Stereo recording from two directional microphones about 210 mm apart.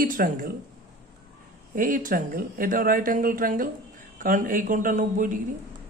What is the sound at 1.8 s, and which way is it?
Speech, 40° right (ahead or behind).